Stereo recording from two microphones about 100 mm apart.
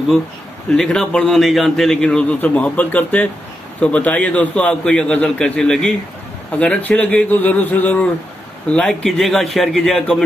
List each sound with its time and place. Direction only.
0.7 s a man's voice: 5° left (ahead or behind)
2.0 s a man's voice: 15° left (ahead or behind)